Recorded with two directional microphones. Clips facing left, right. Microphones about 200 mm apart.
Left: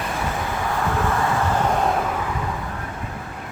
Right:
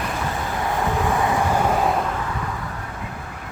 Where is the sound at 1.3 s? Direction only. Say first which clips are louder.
Right 1 dB; 5° right (ahead or behind).